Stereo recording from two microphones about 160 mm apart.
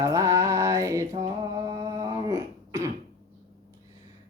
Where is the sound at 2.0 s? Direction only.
20° right (ahead or behind).